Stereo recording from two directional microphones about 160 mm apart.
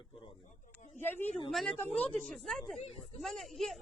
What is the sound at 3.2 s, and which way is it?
Speech, centre (ahead or behind).